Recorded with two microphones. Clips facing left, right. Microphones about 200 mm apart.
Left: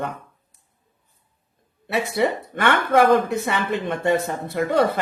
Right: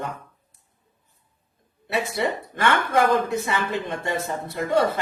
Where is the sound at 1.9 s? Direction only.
60° left (ahead or behind).